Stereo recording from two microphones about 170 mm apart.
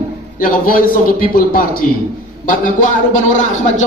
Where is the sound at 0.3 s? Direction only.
55° left (ahead or behind).